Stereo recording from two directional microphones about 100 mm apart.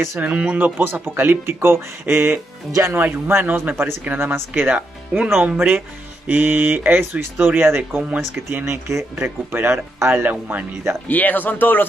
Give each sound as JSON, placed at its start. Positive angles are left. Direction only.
{"t": 0.2, "sound": "speech", "side_deg": -15}
{"t": 11.1, "sound": "speech", "side_deg": 15}